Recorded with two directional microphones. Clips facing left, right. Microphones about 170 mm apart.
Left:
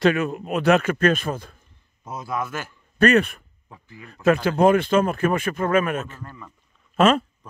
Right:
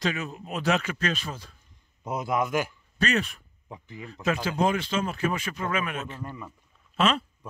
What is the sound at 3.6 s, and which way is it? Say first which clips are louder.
Speech: right 4 dB; 20° right (ahead or behind).